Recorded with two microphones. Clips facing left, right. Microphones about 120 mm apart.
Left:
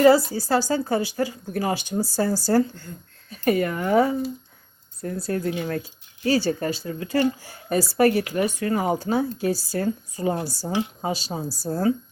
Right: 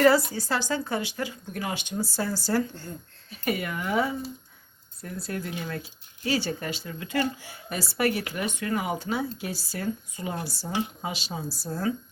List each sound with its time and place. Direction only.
0.0 s speech: 30° left (ahead or behind)